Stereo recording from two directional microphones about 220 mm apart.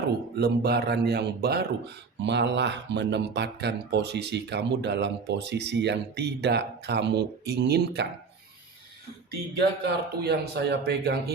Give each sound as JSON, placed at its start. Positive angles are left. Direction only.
{"t": 0.3, "sound": "speech", "side_deg": -45}
{"t": 9.6, "sound": "speech", "side_deg": -50}